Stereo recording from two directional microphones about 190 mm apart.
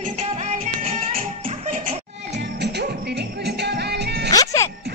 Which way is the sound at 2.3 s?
65° right (ahead or behind).